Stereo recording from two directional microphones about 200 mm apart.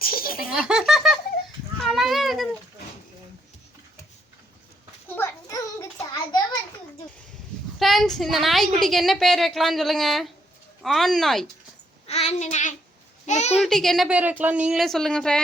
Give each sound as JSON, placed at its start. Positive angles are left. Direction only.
{"t": 0.0, "sound": "baby laughter", "side_deg": 45}
{"t": 0.7, "sound": "laughter", "side_deg": 0}
{"t": 1.9, "sound": "a sound", "side_deg": 0}
{"t": 5.0, "sound": "a sound", "side_deg": 10}
{"t": 7.8, "sound": "a woman's voice", "side_deg": 0}
{"t": 12.0, "sound": "child singing", "side_deg": 30}
{"t": 13.2, "sound": "a child's voice", "side_deg": 35}
{"t": 13.6, "sound": "a woman's voice", "side_deg": 0}